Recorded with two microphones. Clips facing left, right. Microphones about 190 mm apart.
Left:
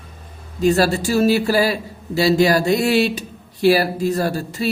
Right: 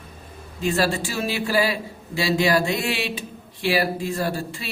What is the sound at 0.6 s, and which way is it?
A man's voice, 40° left (ahead or behind).